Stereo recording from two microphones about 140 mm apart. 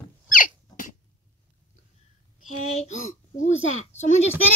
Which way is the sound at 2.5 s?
55° left (ahead or behind).